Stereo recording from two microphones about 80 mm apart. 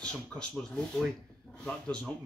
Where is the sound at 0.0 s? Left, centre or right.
Centre.